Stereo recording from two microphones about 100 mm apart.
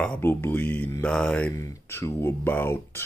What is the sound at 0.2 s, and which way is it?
Speech, 20° left (ahead or behind).